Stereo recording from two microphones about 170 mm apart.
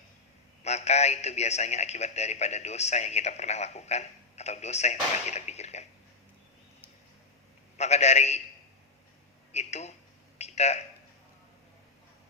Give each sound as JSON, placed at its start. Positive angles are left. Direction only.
{"t": 0.6, "sound": "a man's voice", "side_deg": 40}
{"t": 7.8, "sound": "a man's voice", "side_deg": 40}
{"t": 9.5, "sound": "a man's voice", "side_deg": 40}
{"t": 10.3, "sound": "a sound", "side_deg": 40}